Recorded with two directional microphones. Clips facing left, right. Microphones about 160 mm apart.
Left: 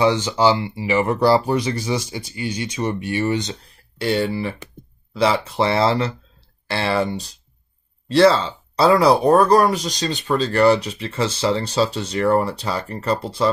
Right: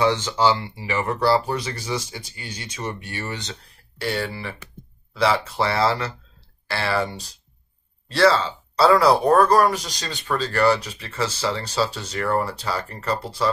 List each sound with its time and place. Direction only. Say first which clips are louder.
0.0 s speech: left 3 dB; 15° left (ahead or behind)